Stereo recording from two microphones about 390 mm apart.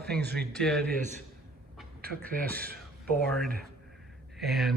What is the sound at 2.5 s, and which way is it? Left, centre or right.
Speech, right.